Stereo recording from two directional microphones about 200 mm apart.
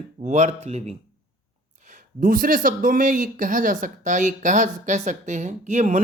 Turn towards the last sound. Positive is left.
turn(degrees=-35)  # may be behind; listen again after turning